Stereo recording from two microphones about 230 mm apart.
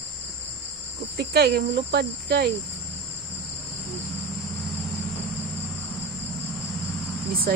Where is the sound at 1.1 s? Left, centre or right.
Right.